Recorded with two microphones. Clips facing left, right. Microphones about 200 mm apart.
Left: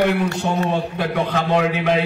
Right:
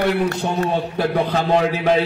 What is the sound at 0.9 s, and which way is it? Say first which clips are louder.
A man's voice: right 2 dB; 35° right (ahead or behind).